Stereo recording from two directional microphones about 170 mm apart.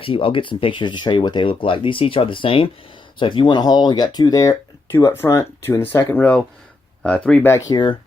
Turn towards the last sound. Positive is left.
turn(degrees=25)  # may be behind; listen again after turning